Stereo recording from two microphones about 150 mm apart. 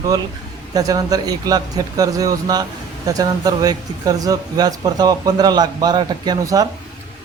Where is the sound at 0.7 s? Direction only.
25° right (ahead or behind).